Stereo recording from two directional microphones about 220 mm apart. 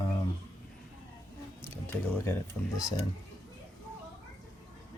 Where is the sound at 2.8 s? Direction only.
15° left (ahead or behind).